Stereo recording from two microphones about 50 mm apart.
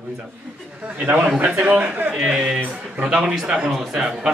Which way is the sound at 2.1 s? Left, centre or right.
Centre.